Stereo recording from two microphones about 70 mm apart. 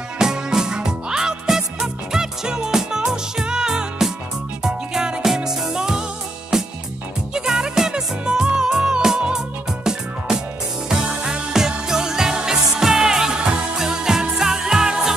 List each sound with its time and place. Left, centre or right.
0.2 s music: centre